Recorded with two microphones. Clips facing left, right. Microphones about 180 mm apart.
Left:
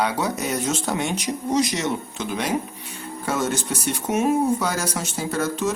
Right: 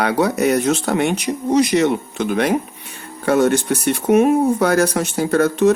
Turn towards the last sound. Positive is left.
turn(degrees=-60)  # may be behind; listen again after turning